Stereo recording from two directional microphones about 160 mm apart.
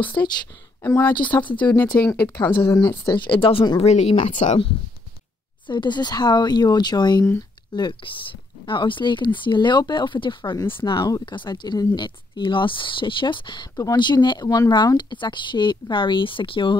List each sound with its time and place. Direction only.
0.2 s speech: 15° left (ahead or behind)
3.3 s speech: 35° left (ahead or behind)
5.7 s speech: 30° left (ahead or behind)